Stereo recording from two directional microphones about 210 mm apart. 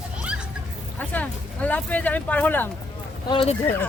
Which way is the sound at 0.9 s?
5° left (ahead or behind).